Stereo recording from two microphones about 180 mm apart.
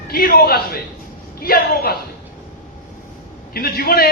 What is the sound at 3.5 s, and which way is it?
Speech, 60° left (ahead or behind).